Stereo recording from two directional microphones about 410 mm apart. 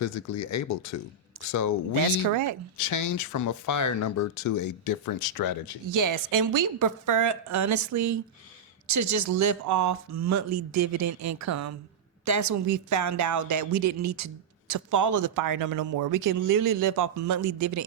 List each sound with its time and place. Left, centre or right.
0.0 s speech: left
2.2 s speech: right
2.7 s speech: left
5.9 s speech: right